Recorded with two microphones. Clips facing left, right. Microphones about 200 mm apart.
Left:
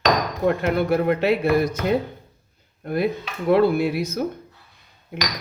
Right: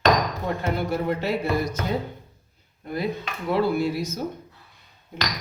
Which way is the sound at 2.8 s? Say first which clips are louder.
Left 5 dB; 60° left (ahead or behind).